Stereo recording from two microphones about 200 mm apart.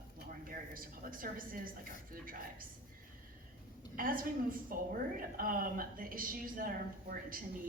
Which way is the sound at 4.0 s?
45° right (ahead or behind).